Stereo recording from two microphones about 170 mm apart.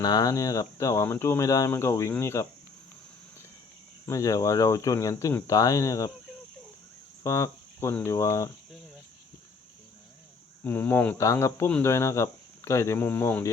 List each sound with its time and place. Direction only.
0.0 s speech: 20° left (ahead or behind)
4.0 s speech: 20° left (ahead or behind)
7.2 s speech: 20° left (ahead or behind)
10.6 s speech: 10° left (ahead or behind)